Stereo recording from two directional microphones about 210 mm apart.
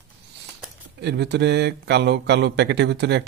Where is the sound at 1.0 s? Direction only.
55° right (ahead or behind).